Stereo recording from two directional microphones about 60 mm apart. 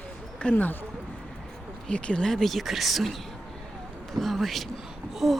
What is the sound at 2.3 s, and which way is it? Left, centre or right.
Speech, centre.